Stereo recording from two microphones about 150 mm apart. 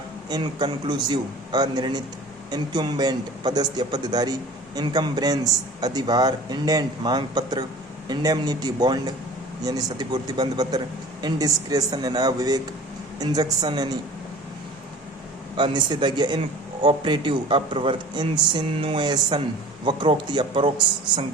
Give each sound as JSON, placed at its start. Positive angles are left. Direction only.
{"t": 0.3, "sound": "a man's voice", "side_deg": -30}
{"t": 15.5, "sound": "speech", "side_deg": -30}